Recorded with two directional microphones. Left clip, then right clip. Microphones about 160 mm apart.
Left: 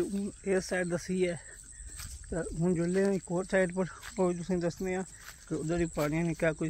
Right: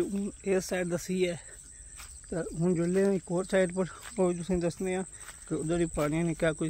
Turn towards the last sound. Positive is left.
turn(degrees=-20)  # may be behind; listen again after turning